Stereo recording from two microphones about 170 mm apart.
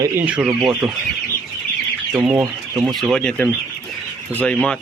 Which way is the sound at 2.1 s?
10° right (ahead or behind).